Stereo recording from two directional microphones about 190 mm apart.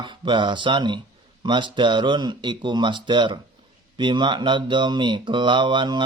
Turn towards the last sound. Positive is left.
turn(degrees=-25)  # may be behind; listen again after turning